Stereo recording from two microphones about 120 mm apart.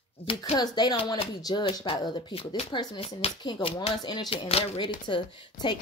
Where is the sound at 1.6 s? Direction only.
50° left (ahead or behind).